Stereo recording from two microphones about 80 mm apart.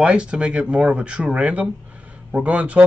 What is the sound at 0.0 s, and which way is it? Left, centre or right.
Speech, centre.